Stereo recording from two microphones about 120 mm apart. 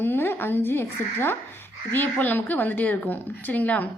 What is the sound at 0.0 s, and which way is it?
A woman's voice, 15° left (ahead or behind).